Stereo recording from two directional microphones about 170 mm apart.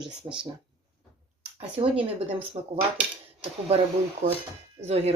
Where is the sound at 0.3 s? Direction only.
30° right (ahead or behind).